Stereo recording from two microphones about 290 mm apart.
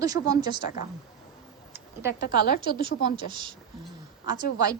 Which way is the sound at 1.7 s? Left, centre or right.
Centre.